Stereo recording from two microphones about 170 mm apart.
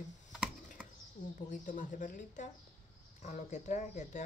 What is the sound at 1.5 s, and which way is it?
Speech, 50° left (ahead or behind).